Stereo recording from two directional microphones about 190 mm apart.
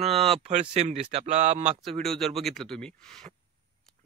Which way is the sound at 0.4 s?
35° right (ahead or behind).